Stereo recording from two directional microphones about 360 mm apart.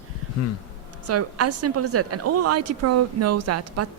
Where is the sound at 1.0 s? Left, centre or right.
Right.